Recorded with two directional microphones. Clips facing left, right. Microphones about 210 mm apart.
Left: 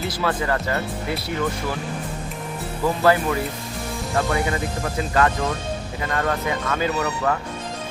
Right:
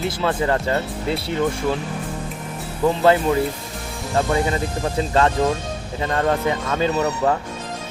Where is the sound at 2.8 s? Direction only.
20° right (ahead or behind).